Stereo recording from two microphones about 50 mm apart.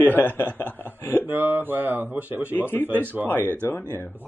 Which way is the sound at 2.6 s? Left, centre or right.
Left.